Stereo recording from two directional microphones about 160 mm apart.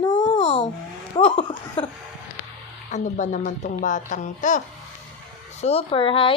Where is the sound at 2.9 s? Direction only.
50° left (ahead or behind).